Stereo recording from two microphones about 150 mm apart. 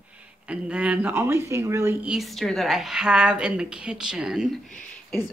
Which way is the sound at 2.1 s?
Centre (ahead or behind).